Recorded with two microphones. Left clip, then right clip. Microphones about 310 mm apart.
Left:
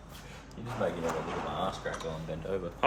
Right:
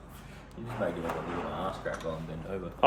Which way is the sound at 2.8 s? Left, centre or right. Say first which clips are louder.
Right 4 dB; centre.